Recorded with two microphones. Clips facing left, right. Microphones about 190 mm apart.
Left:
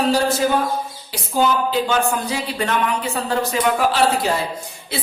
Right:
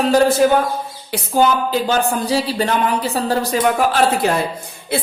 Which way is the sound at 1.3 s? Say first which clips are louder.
Right 3 dB; 45° right (ahead or behind).